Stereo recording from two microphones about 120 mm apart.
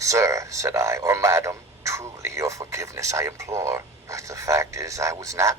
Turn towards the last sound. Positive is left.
turn(degrees=-25)  # may be behind; listen again after turning